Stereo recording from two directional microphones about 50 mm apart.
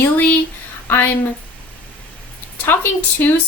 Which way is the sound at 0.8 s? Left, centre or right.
Left.